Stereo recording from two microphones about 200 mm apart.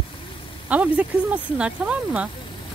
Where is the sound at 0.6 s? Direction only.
5° right (ahead or behind).